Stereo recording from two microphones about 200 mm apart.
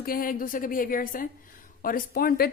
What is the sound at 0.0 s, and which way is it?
A woman's voice, 45° left (ahead or behind).